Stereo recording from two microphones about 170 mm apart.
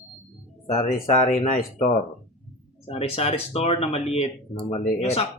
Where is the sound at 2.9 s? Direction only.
35° left (ahead or behind).